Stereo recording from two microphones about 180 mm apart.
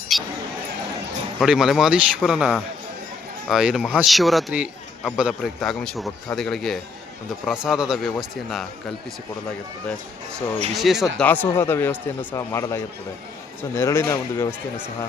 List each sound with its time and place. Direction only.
0.1 s speech: centre (ahead or behind)
1.4 s a man's voice: centre (ahead or behind)
10.8 s a man's voice: centre (ahead or behind); by 14.5 s 15° left (ahead or behind)